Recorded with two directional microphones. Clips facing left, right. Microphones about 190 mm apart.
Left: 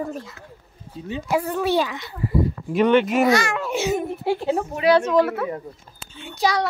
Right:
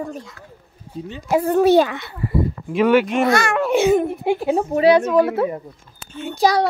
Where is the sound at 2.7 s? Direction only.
5° right (ahead or behind).